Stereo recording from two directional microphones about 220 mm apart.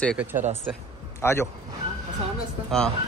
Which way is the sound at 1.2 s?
10° left (ahead or behind).